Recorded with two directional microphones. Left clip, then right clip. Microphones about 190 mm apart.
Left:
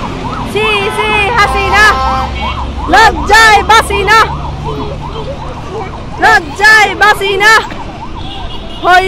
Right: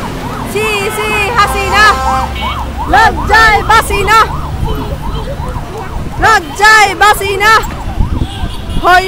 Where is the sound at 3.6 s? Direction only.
10° right (ahead or behind).